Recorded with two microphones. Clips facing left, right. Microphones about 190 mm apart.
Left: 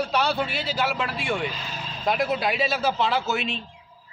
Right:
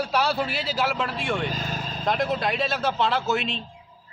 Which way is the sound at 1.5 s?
45° right (ahead or behind).